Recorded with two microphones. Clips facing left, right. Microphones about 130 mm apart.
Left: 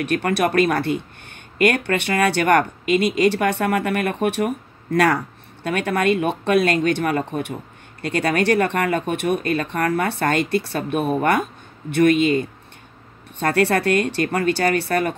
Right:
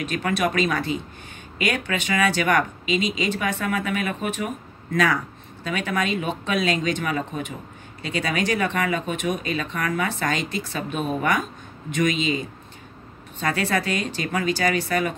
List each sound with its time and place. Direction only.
0.0 s speech: 65° left (ahead or behind)